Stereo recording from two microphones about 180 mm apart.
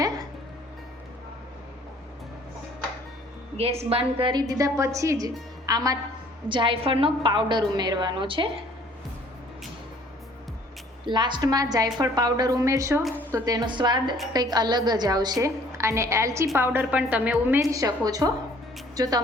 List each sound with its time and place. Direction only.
3.6 s a woman's voice: 35° right (ahead or behind)
11.0 s a woman's voice: 25° right (ahead or behind)